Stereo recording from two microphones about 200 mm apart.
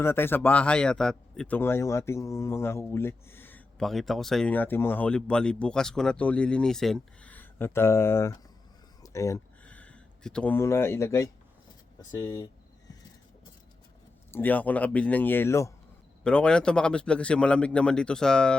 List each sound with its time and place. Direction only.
0.0 s speech: 10° left (ahead or behind)
14.3 s a man's voice: 10° left (ahead or behind)